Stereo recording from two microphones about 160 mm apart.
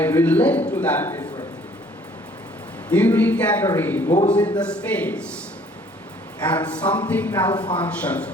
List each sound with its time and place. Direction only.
0.0 s a man's voice: 10° left (ahead or behind)
2.9 s a man's voice: 10° left (ahead or behind)
6.4 s a man's voice: 10° left (ahead or behind)
7.4 s speech: 30° left (ahead or behind)
7.8 s a man's voice: 10° left (ahead or behind)